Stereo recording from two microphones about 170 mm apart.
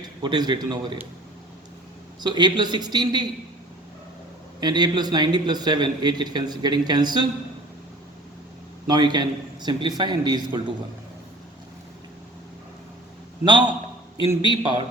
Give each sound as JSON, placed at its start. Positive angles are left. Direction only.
{"t": 0.2, "sound": "a man's voice", "side_deg": -25}
{"t": 2.2, "sound": "a man's voice", "side_deg": -25}
{"t": 4.6, "sound": "a man's voice", "side_deg": -25}
{"t": 8.9, "sound": "a man's voice", "side_deg": -25}
{"t": 13.4, "sound": "a man's voice", "side_deg": -25}